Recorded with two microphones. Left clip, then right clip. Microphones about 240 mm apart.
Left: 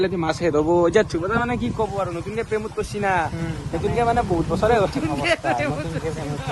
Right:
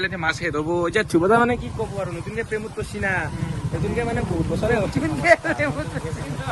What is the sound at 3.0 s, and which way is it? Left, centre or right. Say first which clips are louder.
Speech: left 3 dB; centre.